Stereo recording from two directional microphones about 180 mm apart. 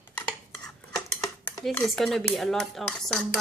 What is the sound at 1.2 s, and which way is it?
Dishes, 20° left (ahead or behind).